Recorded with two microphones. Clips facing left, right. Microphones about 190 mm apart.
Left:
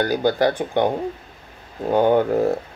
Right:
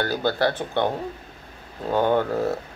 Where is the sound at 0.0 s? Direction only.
15° left (ahead or behind).